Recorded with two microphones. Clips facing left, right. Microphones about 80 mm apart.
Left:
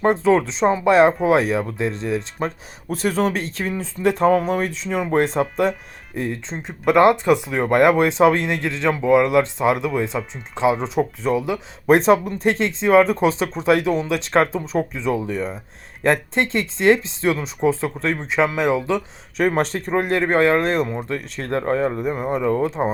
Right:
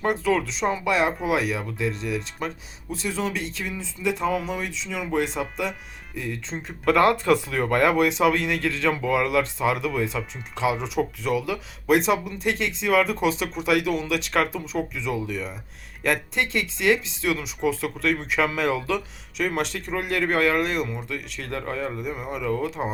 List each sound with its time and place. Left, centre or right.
0.0 s speech: left
2.9 s speech: left
6.5 s speech: left
11.9 s speech: left
19.4 s speech: left